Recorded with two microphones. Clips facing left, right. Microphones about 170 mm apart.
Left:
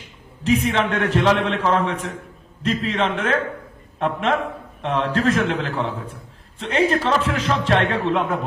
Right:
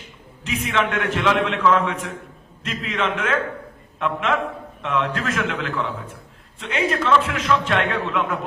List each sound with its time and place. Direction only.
0.4 s a man's voice: 35° left (ahead or behind)